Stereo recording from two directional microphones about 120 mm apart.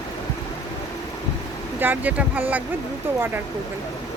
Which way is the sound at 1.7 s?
15° right (ahead or behind).